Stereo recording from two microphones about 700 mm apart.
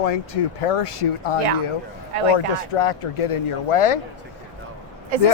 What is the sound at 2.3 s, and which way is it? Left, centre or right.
Speech, left.